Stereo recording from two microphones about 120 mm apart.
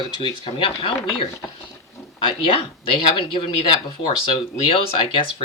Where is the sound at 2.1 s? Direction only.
45° left (ahead or behind).